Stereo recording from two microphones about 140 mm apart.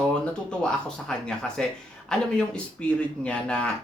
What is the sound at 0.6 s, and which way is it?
A man's voice, 5° left (ahead or behind).